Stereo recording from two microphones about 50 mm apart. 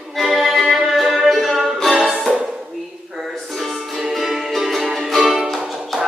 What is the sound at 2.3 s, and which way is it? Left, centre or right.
Dishes, centre.